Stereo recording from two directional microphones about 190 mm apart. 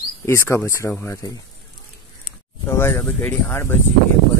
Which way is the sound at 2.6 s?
10° left (ahead or behind).